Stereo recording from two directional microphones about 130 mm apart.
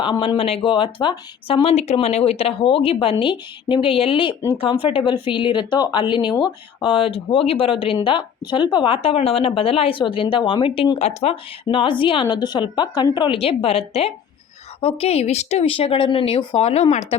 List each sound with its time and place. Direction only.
0.0 s a woman's voice: 35° left (ahead or behind); by 17.2 s 55° left (ahead or behind)